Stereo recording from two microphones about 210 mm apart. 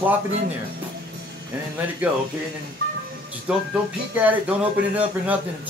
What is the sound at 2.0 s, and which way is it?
Speech, 5° right (ahead or behind).